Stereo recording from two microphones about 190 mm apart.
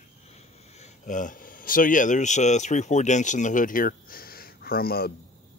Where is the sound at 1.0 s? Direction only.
45° left (ahead or behind).